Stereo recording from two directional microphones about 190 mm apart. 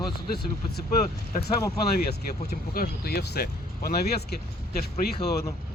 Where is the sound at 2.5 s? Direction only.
50° left (ahead or behind).